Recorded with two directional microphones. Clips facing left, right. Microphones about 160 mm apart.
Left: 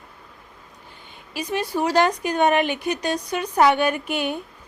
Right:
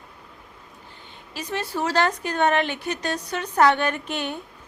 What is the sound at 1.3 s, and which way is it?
A woman's voice, 15° left (ahead or behind).